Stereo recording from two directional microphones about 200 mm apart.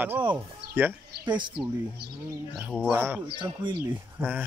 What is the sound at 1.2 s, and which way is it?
Speech, 20° right (ahead or behind).